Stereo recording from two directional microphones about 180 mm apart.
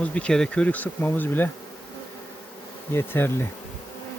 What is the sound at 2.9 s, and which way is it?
Speech, 15° left (ahead or behind).